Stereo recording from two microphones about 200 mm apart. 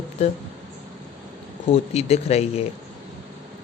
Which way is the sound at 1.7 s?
30° left (ahead or behind).